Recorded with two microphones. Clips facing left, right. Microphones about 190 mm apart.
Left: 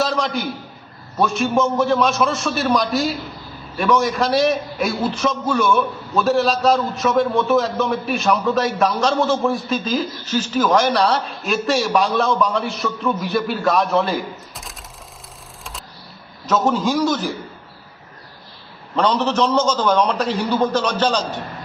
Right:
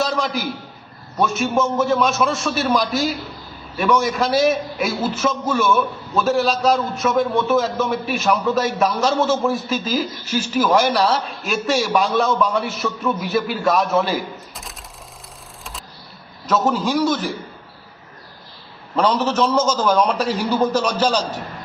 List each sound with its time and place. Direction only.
0.0 s a sound: centre (ahead or behind)
1.2 s a man's voice: centre (ahead or behind)
16.5 s a man's voice: centre (ahead or behind)
18.9 s a man's voice: 5° right (ahead or behind)